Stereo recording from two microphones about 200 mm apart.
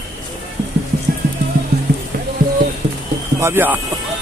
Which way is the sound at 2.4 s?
45° right (ahead or behind).